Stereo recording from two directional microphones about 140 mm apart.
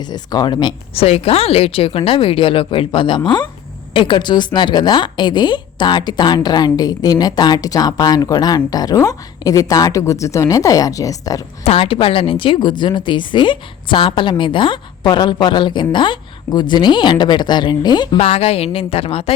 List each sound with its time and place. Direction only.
0.0 s a woman's voice: 30° left (ahead or behind)
11.6 s a woman's voice: 45° left (ahead or behind)
18.2 s a woman's voice: 45° left (ahead or behind)